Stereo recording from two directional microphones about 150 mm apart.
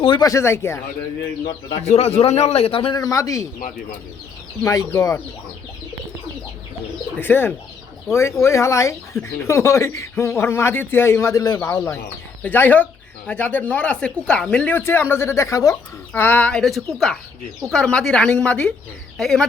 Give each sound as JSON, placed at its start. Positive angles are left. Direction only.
{"t": 0.0, "sound": "speech", "side_deg": 35}
{"t": 0.3, "sound": "speech", "side_deg": 20}
{"t": 1.8, "sound": "a man's voice", "side_deg": 45}
{"t": 4.6, "sound": "speech", "side_deg": 20}
{"t": 7.2, "sound": "speech", "side_deg": 15}